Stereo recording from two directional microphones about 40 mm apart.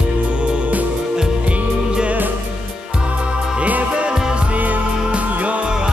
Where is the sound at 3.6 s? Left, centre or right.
Right.